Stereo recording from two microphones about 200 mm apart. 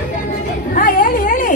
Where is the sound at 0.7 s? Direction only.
45° left (ahead or behind).